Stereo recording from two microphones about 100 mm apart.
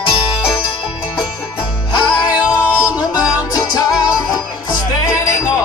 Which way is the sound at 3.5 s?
40° left (ahead or behind).